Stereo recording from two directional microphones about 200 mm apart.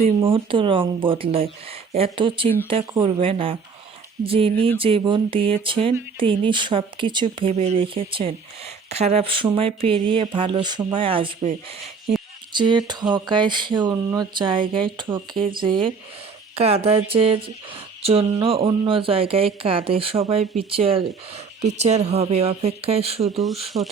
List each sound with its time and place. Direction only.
0.0 s speech: 25° right (ahead or behind)
12.5 s speech: 20° right (ahead or behind)